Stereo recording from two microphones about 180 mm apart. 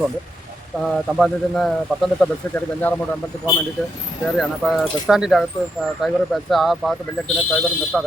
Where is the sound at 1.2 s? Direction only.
Centre (ahead or behind).